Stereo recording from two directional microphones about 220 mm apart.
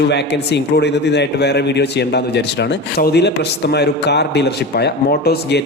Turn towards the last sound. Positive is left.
turn(degrees=45)  # may be behind; listen again after turning